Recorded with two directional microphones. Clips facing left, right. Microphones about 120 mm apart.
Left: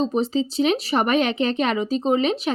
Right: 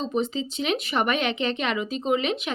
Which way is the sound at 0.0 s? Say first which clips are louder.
Left 5 dB; 35° left (ahead or behind).